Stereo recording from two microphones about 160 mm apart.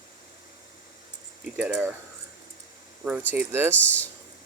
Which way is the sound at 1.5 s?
10° right (ahead or behind).